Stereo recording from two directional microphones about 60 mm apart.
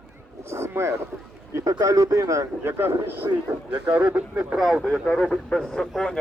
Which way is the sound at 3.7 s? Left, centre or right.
Right.